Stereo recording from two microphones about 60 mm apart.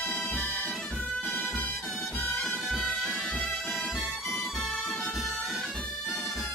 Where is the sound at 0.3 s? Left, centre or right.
Left.